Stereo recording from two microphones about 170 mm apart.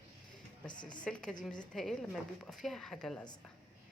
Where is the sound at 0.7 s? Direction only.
25° left (ahead or behind).